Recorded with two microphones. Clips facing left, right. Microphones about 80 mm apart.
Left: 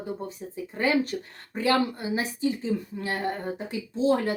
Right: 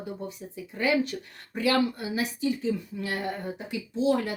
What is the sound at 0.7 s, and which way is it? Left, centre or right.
A woman's voice, left.